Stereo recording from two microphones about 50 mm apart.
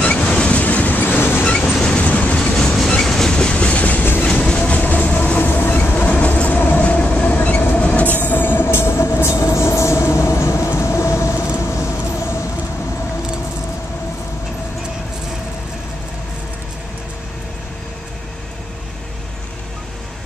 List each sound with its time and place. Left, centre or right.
0.0 s train: left
1.4 s train: left
2.6 s train: centre
3.3 s train: left
4.0 s train: left
4.3 s train: centre
8.1 s train: left
11.7 s vehicle: left